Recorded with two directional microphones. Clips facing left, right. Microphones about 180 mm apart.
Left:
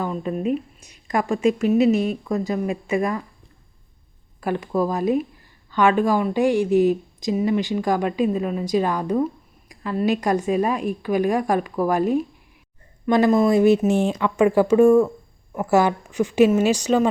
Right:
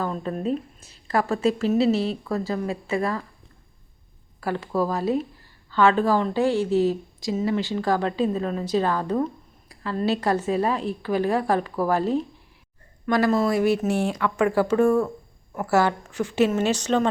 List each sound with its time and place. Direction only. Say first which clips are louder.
0.0 s a woman's voice: left 2 dB; 10° left (ahead or behind)
4.4 s a woman's voice: left 2 dB; 15° left (ahead or behind)